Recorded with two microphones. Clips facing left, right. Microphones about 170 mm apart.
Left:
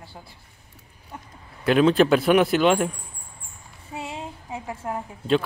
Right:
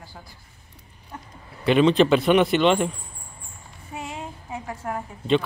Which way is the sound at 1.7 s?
5° left (ahead or behind).